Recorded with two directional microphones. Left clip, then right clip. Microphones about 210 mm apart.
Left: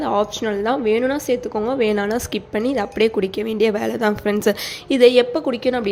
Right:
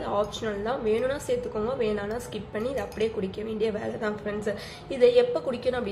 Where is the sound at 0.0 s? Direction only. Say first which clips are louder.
Left 8 dB; 45° left (ahead or behind).